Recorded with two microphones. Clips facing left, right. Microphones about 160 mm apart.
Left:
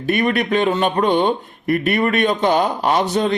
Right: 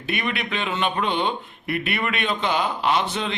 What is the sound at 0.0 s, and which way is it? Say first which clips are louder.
A man's voice: left 9 dB; 45° left (ahead or behind).